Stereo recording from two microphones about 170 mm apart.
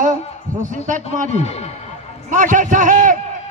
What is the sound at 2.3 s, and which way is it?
Speech, 50° right (ahead or behind).